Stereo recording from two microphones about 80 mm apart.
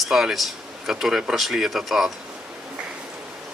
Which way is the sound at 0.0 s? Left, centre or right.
Centre.